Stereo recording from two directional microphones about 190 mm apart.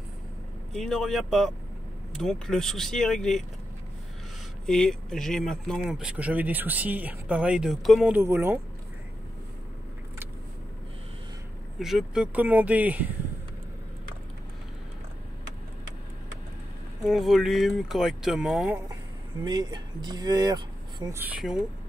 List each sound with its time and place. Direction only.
0.7 s speech: centre (ahead or behind)
4.6 s speech: centre (ahead or behind)
11.8 s speech: 5° right (ahead or behind)
17.0 s speech: centre (ahead or behind)
19.4 s speech: 20° right (ahead or behind)
21.2 s speech: 5° right (ahead or behind)